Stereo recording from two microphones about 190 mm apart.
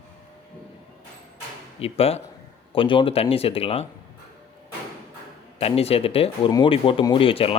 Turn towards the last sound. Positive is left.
turn(degrees=30)  # may be behind; listen again after turning